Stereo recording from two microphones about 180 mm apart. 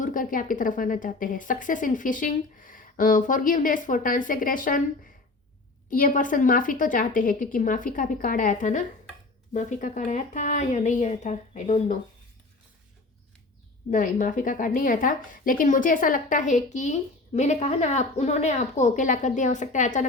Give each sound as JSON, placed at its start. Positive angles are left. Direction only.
{"t": 0.0, "sound": "a woman's voice", "side_deg": 50}
{"t": 5.9, "sound": "a woman's voice", "side_deg": 50}
{"t": 13.9, "sound": "a woman's voice", "side_deg": 45}